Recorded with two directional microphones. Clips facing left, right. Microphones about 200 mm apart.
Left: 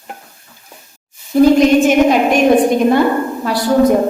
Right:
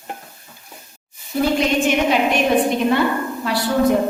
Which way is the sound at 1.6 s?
45° left (ahead or behind).